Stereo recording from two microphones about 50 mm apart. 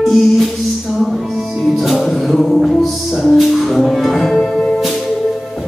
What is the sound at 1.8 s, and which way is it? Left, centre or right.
Music, centre.